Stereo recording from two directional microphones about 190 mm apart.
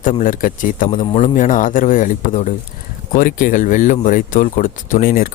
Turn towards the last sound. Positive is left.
turn(degrees=50)  # may be behind; listen again after turning